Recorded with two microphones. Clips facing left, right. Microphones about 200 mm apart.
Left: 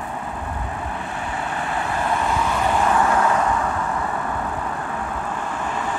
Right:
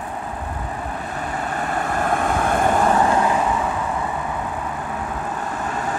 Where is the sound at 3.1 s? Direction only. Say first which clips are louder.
Right 1 dB; 20° right (ahead or behind).